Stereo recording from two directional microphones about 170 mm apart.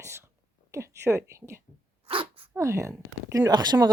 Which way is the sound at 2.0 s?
30° right (ahead or behind).